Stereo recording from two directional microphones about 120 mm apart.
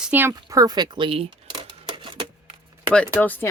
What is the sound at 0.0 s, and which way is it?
Speech, 15° right (ahead or behind).